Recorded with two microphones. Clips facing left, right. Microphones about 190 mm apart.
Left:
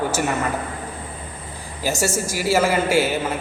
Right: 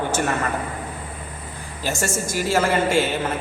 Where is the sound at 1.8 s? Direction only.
10° left (ahead or behind).